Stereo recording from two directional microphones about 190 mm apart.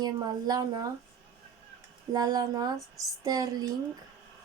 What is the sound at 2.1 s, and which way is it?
Speech, 20° right (ahead or behind).